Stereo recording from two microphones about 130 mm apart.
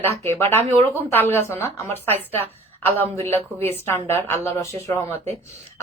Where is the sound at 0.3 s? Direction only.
20° left (ahead or behind).